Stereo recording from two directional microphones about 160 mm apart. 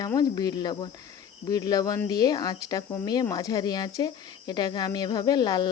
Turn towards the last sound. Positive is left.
turn(degrees=25)  # may be behind; listen again after turning